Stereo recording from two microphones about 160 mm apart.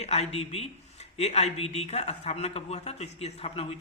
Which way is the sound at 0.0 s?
40° left (ahead or behind).